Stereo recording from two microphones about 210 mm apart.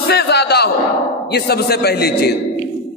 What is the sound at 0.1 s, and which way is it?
A man's voice, 50° left (ahead or behind).